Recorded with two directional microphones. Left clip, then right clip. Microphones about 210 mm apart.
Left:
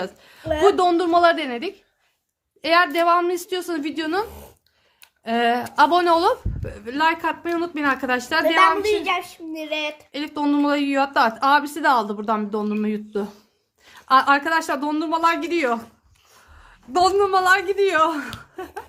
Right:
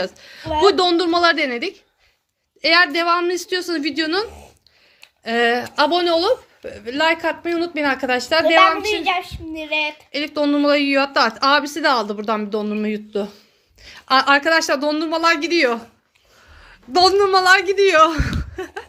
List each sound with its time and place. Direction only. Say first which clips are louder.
0.0 s a woman's voice: right 4 dB; 5° right (ahead or behind); by 6.3 s 15° left (ahead or behind)
6.6 s a woman's voice: right 2 dB; centre (ahead or behind)
9.1 s child singing: right 2 dB; 25° left (ahead or behind)
10.1 s a woman's voice: right 2 dB; centre (ahead or behind)